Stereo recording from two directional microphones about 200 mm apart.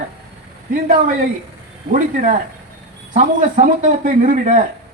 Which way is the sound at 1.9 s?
40° right (ahead or behind).